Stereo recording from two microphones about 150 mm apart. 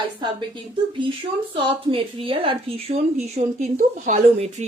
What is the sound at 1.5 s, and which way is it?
A woman's voice, 35° right (ahead or behind).